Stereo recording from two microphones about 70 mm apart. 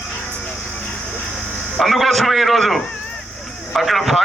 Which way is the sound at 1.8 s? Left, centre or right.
Centre.